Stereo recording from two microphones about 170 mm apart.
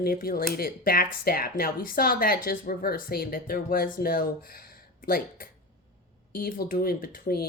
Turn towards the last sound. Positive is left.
turn(degrees=60)  # may be behind; listen again after turning